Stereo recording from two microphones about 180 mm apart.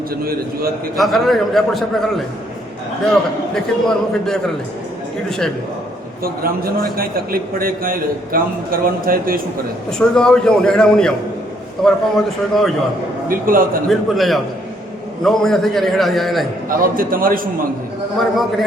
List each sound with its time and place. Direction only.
0.2 s a man's voice: 55° right (ahead or behind)
0.9 s a man's voice: centre (ahead or behind)
6.9 s a man's voice: 55° right (ahead or behind)
10.0 s a man's voice: 5° left (ahead or behind)
12.1 s a man's voice: centre (ahead or behind)
13.2 s a man's voice: 50° right (ahead or behind)
13.8 s a man's voice: centre (ahead or behind)
16.6 s a man's voice: 50° right (ahead or behind)
18.2 s a man's voice: centre (ahead or behind)